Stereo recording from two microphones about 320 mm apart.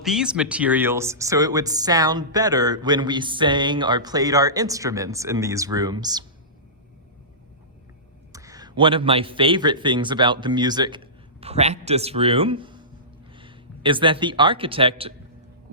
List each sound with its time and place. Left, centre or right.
0.0 s speech: centre
8.3 s a man's voice: centre